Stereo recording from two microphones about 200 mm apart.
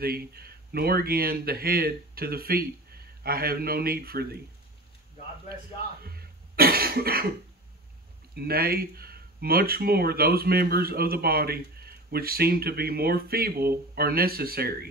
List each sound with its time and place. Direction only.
0.0 s speech: 50° right (ahead or behind)
6.0 s cough: 50° right (ahead or behind)
8.4 s speech: 50° right (ahead or behind)